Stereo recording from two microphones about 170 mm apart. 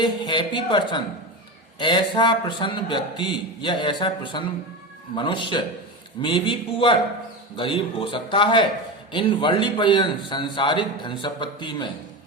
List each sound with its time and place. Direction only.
0.0 s a man's voice: 25° left (ahead or behind)